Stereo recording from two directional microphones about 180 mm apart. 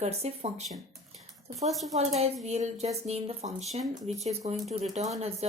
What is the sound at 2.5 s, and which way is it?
A woman's voice, 35° right (ahead or behind).